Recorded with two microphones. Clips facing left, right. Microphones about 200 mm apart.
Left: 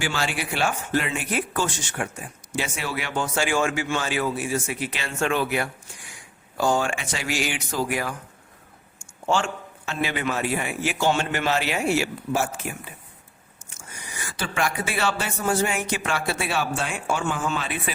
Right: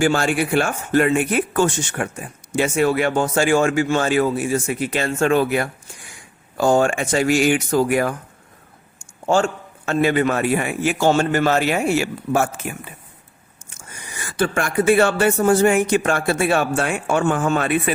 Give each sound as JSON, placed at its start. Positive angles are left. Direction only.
{"t": 0.0, "sound": "a man's voice", "side_deg": -50}
{"t": 14.3, "sound": "a man's voice", "side_deg": -50}